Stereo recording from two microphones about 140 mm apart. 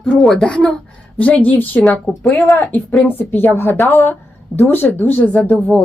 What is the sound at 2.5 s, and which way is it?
A woman's voice, 15° left (ahead or behind).